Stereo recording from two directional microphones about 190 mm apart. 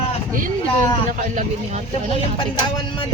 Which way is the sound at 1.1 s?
40° right (ahead or behind).